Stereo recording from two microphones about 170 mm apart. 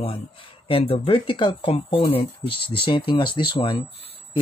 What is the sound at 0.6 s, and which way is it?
Speech, 35° left (ahead or behind).